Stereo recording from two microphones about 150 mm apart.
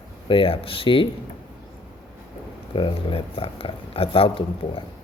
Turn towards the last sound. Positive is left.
turn(degrees=35)  # may be behind; listen again after turning